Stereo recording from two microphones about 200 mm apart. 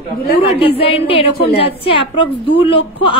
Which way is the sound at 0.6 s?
30° left (ahead or behind).